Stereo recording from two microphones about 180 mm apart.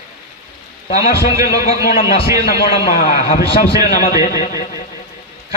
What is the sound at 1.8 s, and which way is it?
A man's voice, 55° left (ahead or behind).